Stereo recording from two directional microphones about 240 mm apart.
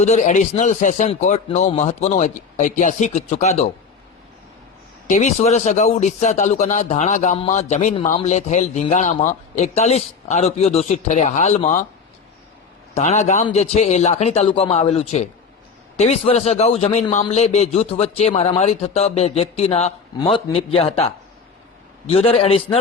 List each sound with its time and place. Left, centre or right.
0.0 s speech: left
5.0 s speech: left
12.9 s speech: left